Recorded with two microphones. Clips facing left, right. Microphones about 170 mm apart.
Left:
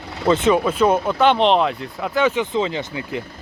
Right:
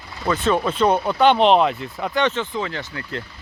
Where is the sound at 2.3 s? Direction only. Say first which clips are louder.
Left 5 dB; 20° left (ahead or behind).